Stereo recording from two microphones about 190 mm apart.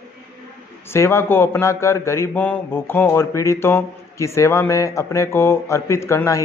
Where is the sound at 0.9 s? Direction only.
15° left (ahead or behind).